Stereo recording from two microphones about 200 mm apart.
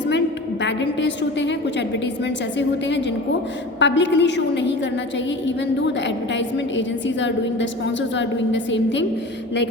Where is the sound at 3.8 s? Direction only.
65° left (ahead or behind).